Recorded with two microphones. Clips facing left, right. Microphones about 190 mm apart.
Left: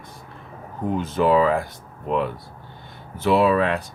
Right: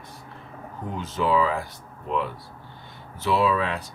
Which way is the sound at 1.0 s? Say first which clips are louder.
Left 4 dB; 55° left (ahead or behind).